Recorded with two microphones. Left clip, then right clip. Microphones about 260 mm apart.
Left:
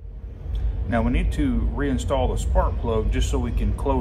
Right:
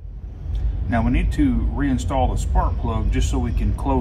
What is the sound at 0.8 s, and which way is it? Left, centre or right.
Speech, centre.